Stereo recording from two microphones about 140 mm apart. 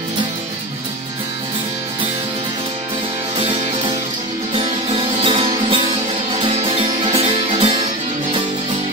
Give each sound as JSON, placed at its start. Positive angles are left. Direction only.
{"t": 4.6, "sound": "music", "side_deg": -40}